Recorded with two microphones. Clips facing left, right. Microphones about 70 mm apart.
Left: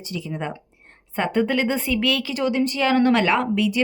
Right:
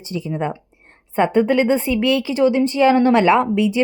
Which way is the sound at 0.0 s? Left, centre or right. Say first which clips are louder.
Right 5 dB; right.